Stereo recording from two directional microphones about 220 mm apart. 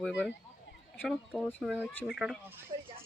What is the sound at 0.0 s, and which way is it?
Speech, centre (ahead or behind).